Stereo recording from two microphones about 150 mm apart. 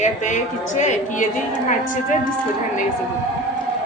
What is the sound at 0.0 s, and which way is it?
A woman's voice, 55° left (ahead or behind).